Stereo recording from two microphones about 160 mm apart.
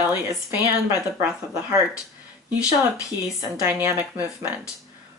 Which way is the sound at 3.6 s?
15° right (ahead or behind).